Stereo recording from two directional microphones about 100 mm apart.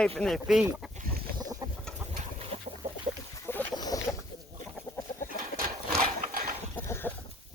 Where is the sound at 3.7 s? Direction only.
40° left (ahead or behind).